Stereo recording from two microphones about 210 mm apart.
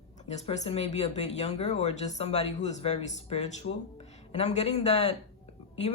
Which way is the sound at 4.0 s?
30° left (ahead or behind).